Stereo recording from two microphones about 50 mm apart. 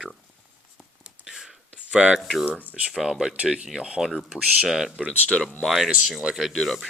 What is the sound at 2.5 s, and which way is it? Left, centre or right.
Speech, left.